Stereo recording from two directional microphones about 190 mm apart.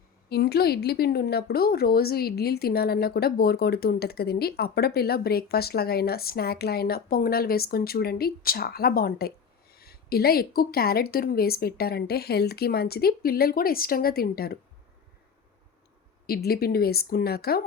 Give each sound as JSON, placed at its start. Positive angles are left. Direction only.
{"t": 0.3, "sound": "a woman's voice", "side_deg": 55}
{"t": 16.2, "sound": "a woman's voice", "side_deg": 50}